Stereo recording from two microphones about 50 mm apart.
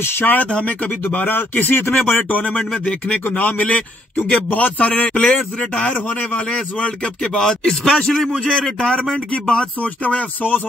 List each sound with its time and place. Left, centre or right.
0.0 s speech: left
0.5 s a man's voice: centre
1.1 s speech: left
2.2 s a man's voice: left
7.3 s a man's voice: centre
10.0 s speech: left